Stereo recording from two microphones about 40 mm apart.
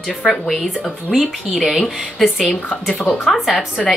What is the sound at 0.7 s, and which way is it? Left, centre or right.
A woman's voice, centre.